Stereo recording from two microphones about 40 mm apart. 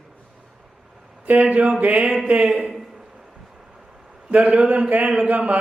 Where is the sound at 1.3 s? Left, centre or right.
Right.